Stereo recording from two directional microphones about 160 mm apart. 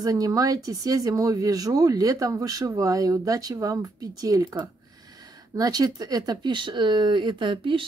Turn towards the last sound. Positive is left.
turn(degrees=-30)  # may be behind; listen again after turning